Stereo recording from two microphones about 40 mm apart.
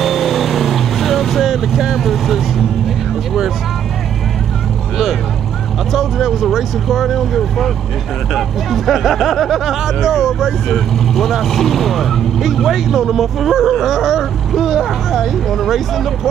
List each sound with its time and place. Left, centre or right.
0.0 s vehicle: centre
5.9 s speech: centre
15.5 s speech: centre